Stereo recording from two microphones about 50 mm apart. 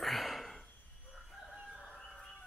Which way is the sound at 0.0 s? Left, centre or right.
Centre.